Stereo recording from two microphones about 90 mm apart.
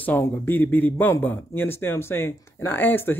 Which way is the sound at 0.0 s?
25° left (ahead or behind).